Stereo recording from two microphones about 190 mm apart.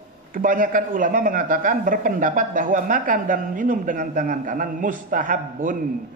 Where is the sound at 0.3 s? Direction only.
45° right (ahead or behind).